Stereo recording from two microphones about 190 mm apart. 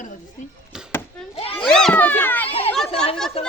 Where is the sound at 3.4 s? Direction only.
30° left (ahead or behind).